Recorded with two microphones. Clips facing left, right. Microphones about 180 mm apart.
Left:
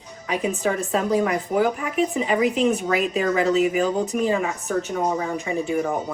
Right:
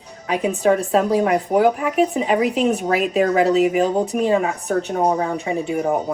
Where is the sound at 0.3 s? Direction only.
35° right (ahead or behind).